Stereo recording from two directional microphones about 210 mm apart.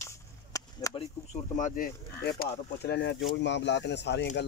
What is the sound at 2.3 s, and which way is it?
Speech, 50° left (ahead or behind).